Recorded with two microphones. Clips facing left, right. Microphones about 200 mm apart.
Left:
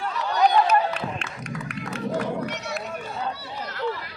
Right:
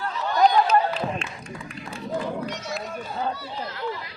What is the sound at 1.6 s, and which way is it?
Music, 75° left (ahead or behind).